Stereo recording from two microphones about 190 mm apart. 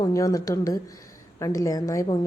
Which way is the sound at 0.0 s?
20° left (ahead or behind).